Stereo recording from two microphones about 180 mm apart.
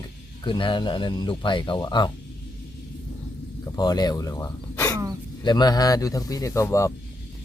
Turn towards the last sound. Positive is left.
turn(degrees=15)  # may be behind; listen again after turning